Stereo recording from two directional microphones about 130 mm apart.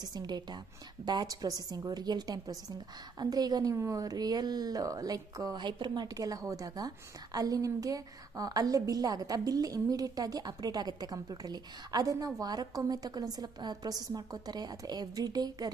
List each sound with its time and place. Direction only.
0.0 s a woman's voice: 30° right (ahead or behind)